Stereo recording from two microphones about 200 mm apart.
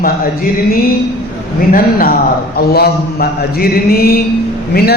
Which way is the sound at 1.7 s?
45° left (ahead or behind).